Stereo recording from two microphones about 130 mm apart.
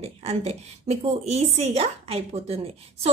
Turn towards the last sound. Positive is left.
turn(degrees=-55)  # may be behind; listen again after turning